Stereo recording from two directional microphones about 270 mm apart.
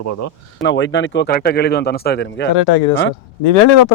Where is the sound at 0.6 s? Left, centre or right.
Left.